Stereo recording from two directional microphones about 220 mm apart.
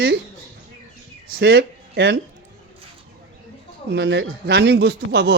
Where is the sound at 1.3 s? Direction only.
50° right (ahead or behind).